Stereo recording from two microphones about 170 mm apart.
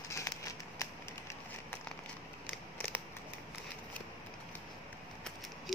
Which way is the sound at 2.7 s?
10° left (ahead or behind).